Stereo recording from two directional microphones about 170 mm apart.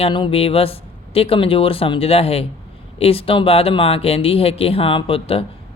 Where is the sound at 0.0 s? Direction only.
30° left (ahead or behind).